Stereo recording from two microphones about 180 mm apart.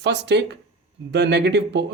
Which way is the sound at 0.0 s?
75° right (ahead or behind).